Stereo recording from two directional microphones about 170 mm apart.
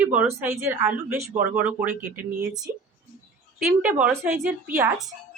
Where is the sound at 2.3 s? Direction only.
65° right (ahead or behind).